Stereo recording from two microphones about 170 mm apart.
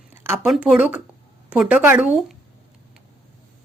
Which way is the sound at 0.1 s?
15° right (ahead or behind).